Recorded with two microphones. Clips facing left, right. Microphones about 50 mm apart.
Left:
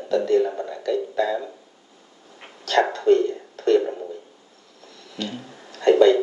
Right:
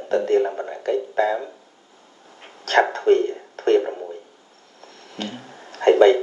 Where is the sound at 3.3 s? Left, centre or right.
Right.